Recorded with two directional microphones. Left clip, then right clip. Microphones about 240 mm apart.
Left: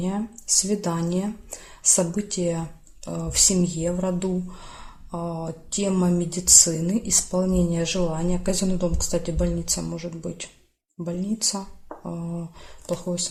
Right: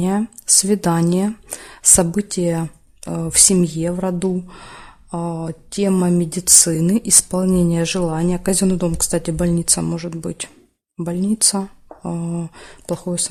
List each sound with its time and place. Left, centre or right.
0.6 s speech: right